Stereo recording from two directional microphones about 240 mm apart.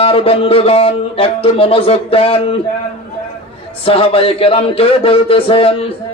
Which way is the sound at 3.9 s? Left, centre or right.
Left.